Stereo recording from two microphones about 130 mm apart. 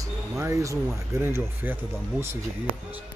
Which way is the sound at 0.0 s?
20° right (ahead or behind).